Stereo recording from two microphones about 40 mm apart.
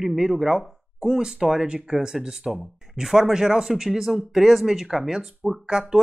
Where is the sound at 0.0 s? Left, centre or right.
Centre.